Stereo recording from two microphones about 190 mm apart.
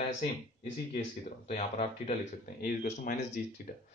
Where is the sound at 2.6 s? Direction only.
45° left (ahead or behind).